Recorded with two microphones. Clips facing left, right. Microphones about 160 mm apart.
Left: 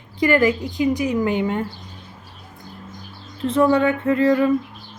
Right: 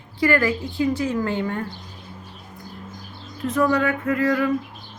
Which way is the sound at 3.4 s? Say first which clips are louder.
Left 4 dB; 25° left (ahead or behind).